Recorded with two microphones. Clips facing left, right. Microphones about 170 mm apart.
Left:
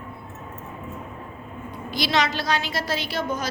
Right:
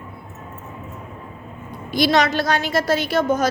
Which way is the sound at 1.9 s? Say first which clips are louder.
Right 6 dB; 50° right (ahead or behind).